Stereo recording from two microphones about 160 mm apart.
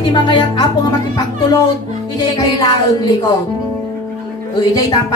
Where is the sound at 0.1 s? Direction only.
30° left (ahead or behind).